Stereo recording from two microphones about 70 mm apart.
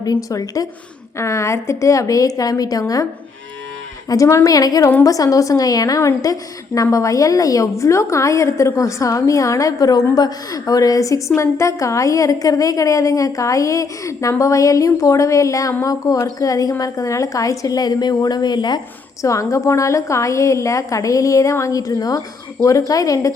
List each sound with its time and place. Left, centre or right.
0.0 s a woman's voice: left
1.2 s a woman's voice: left
4.1 s a woman's voice: left
4.5 s a woman's voice: left
19.2 s a woman's voice: left